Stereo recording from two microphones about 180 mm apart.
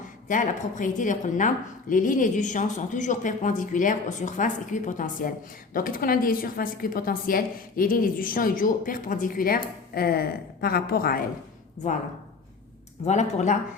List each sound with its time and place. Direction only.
0.3 s a woman's voice: 45° left (ahead or behind)
13.1 s speech: 40° left (ahead or behind)